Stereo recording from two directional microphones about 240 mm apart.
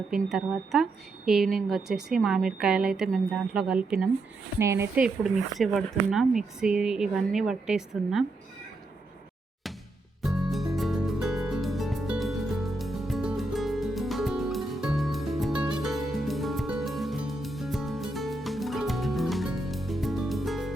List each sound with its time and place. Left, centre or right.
0.1 s speech: centre
10.2 s music: centre